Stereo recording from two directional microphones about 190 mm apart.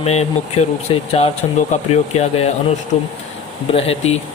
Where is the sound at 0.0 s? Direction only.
35° left (ahead or behind).